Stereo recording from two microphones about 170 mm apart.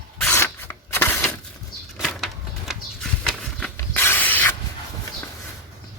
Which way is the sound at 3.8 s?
15° left (ahead or behind).